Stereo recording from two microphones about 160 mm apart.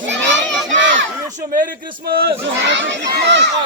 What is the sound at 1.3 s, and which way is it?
Speech, 60° right (ahead or behind).